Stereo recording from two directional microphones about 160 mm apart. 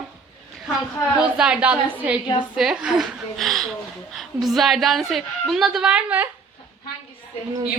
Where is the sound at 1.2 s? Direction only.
5° right (ahead or behind).